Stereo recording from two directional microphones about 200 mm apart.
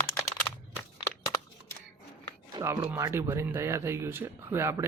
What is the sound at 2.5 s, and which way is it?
Speech, 20° right (ahead or behind).